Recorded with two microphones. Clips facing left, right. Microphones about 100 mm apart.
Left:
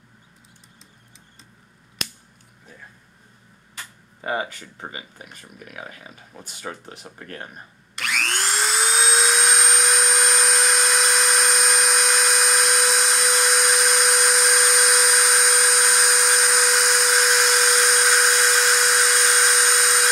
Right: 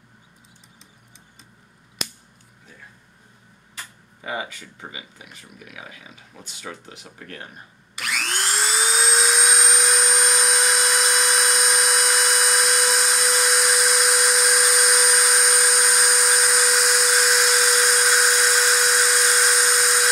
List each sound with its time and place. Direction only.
4.2 s speech: 40° left (ahead or behind)
7.9 s helicopter: 5° right (ahead or behind)